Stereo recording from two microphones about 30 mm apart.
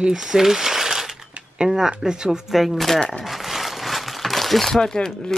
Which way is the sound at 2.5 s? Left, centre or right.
Centre.